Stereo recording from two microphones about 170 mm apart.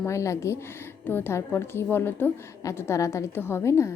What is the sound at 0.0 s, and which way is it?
A woman's voice, 15° left (ahead or behind).